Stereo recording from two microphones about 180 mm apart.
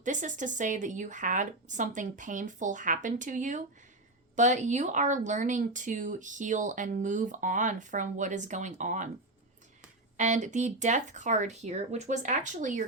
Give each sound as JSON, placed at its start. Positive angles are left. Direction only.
{"t": 0.0, "sound": "speech", "side_deg": -45}
{"t": 10.2, "sound": "speech", "side_deg": -45}